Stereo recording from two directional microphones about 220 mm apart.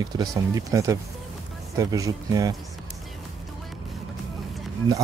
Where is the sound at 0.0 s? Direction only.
20° right (ahead or behind).